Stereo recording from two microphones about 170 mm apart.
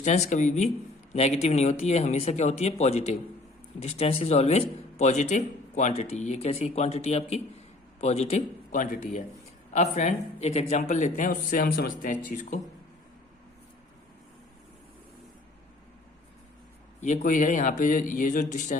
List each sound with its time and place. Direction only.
0.0 s speech: 45° left (ahead or behind)
17.0 s speech: 45° left (ahead or behind)